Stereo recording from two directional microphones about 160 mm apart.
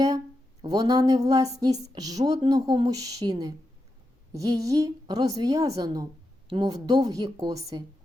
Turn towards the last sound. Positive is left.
turn(degrees=-25)  # may be behind; listen again after turning